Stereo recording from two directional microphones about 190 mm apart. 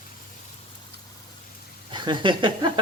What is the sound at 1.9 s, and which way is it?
Speech, 25° right (ahead or behind).